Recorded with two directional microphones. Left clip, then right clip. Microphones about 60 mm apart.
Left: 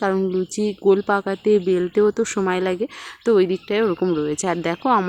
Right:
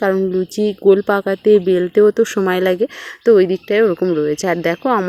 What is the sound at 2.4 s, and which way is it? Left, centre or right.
Speech, right.